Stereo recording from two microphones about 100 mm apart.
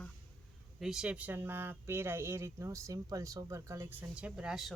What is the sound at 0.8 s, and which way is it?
Speech, 5° right (ahead or behind).